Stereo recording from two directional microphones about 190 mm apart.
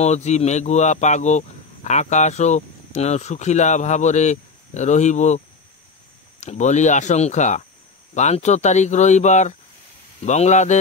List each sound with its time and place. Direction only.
0.0 s speech: 35° left (ahead or behind)
6.4 s speech: 40° left (ahead or behind)